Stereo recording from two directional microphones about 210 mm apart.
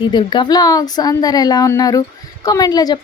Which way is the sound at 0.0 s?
20° left (ahead or behind).